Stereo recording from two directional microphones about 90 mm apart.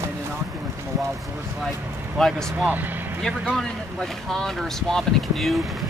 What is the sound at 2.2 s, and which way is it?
Speech, 5° left (ahead or behind).